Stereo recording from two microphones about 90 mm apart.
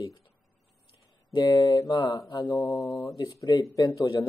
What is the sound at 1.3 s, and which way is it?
Speech, 55° left (ahead or behind).